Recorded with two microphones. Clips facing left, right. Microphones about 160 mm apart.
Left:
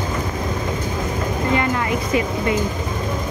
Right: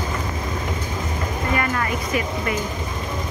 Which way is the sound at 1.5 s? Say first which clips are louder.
Left 2 dB; 20° left (ahead or behind).